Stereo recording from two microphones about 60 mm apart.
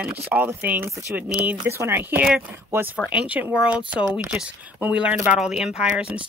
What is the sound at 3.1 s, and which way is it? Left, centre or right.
Speech, centre.